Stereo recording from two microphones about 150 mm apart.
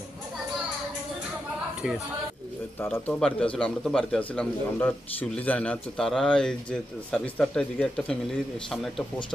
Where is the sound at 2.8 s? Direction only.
15° left (ahead or behind).